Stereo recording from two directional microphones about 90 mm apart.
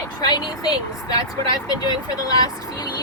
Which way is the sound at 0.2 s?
50° left (ahead or behind).